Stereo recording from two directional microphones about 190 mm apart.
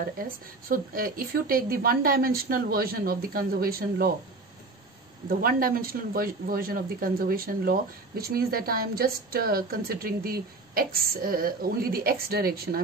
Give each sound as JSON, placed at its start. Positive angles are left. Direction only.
{"t": 0.0, "sound": "speech", "side_deg": -50}
{"t": 5.3, "sound": "speech", "side_deg": -50}